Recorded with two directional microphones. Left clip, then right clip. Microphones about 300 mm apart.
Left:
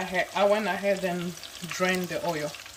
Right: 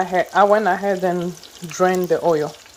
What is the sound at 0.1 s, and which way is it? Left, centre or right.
Speech, right.